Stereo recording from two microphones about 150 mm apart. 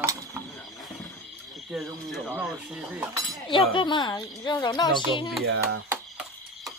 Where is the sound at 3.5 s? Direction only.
30° left (ahead or behind).